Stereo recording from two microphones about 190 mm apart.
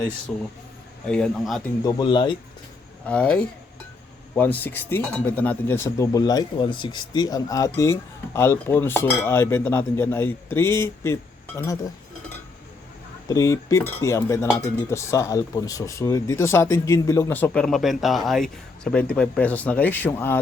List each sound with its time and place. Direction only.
0.3 s speech: centre (ahead or behind)
1.8 s speech: 20° left (ahead or behind)
3.1 s speech: 5° left (ahead or behind)
13.2 s speech: 15° left (ahead or behind)